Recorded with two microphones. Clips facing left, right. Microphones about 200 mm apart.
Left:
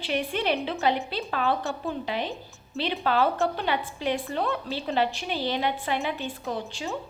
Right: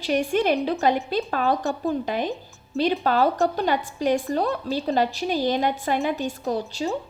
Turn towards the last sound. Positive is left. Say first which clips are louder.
# right 6 dB
turn(degrees=-40)  # may be behind; listen again after turning